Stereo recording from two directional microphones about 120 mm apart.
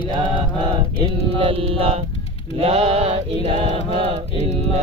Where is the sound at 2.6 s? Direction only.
55° right (ahead or behind).